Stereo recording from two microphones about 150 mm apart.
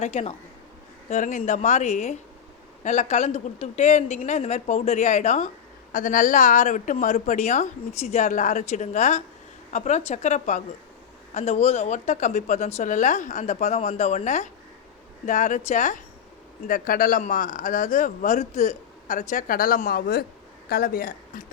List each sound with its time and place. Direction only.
0.0 s speech: 45° left (ahead or behind)
5.9 s speech: 65° left (ahead or behind)
16.6 s speech: 70° left (ahead or behind)